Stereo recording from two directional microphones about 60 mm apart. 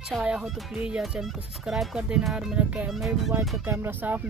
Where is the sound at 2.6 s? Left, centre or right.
Right.